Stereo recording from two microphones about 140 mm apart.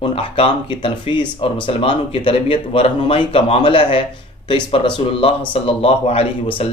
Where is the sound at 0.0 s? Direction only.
40° left (ahead or behind).